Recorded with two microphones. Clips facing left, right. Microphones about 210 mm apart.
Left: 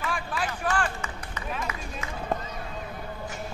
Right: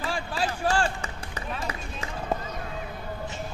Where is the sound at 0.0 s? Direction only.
30° right (ahead or behind).